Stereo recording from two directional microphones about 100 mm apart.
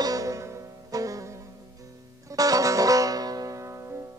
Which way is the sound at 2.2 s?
35° right (ahead or behind).